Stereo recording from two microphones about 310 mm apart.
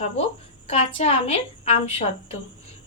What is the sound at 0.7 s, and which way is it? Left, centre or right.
A woman's voice, centre.